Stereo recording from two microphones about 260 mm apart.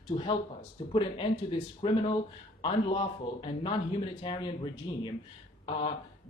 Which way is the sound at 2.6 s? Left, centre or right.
Left.